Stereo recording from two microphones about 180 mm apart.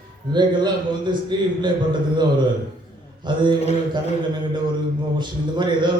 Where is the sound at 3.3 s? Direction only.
25° right (ahead or behind).